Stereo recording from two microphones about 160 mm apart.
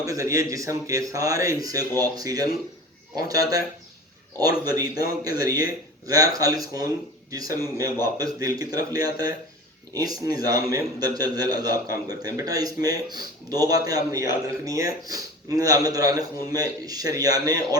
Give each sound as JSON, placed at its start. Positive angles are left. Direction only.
{"t": 0.0, "sound": "a man's voice", "side_deg": -20}